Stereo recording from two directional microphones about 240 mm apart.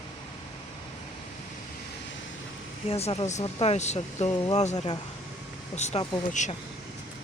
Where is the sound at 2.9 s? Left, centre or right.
Left.